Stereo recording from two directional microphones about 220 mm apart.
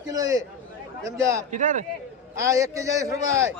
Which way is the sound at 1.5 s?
35° right (ahead or behind).